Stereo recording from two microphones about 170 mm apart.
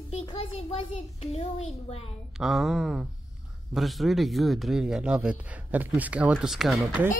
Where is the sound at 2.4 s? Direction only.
Centre (ahead or behind).